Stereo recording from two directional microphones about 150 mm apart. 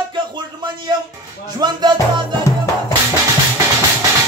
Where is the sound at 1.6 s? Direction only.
30° right (ahead or behind).